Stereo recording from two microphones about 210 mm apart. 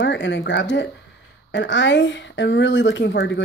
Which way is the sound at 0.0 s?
55° left (ahead or behind).